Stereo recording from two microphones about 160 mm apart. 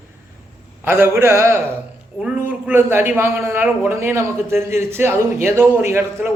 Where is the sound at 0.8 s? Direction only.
15° right (ahead or behind).